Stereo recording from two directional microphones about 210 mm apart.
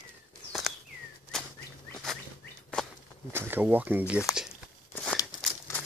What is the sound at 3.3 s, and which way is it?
Speech, 10° right (ahead or behind).